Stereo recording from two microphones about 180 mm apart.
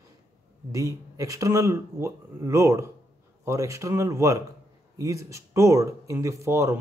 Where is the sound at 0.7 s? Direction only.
20° right (ahead or behind).